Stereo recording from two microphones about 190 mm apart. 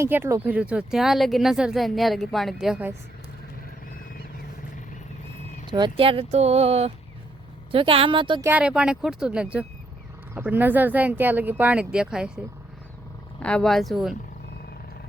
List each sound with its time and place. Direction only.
0.0 s speech: 10° right (ahead or behind)
5.7 s speech: 25° right (ahead or behind)
8.4 s speech: 5° right (ahead or behind)
13.4 s speech: 5° left (ahead or behind)